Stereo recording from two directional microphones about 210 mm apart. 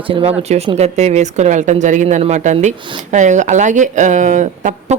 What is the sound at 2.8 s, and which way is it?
Speech, 25° right (ahead or behind).